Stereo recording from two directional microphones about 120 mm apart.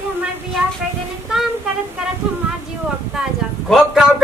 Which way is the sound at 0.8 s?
5° right (ahead or behind).